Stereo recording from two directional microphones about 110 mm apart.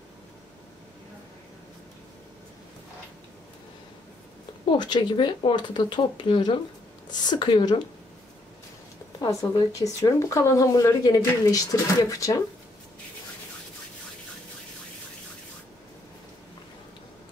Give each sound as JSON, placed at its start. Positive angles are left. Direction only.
{"t": 4.6, "sound": "speech", "side_deg": 40}
{"t": 9.2, "sound": "speech", "side_deg": 35}